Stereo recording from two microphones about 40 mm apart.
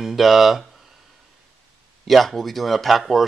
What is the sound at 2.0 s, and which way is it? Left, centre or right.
Speech, centre.